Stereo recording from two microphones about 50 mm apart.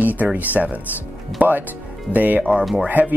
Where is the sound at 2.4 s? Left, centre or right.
Centre.